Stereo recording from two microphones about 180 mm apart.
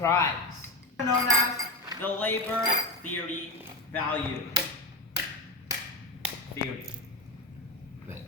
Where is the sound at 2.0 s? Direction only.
10° left (ahead or behind).